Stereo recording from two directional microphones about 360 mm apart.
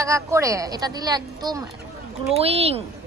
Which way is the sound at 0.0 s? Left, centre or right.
Centre.